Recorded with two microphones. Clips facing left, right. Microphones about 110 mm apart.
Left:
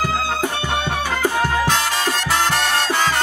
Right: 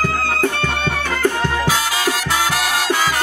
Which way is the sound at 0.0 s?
15° left (ahead or behind).